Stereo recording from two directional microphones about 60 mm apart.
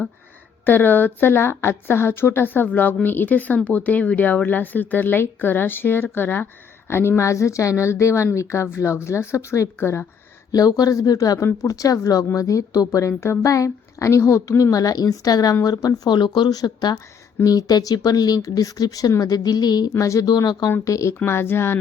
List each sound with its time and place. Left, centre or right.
0.6 s a woman's voice: left
7.2 s a woman's voice: left
9.7 s a woman's voice: left
10.5 s speech: left
11.6 s a woman's voice: left
13.4 s a woman's voice: left
17.4 s speech: left
20.0 s a woman's voice: left
21.2 s a woman's voice: left